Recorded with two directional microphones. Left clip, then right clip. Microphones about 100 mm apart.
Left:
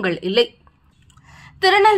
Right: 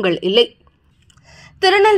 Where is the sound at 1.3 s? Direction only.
30° right (ahead or behind).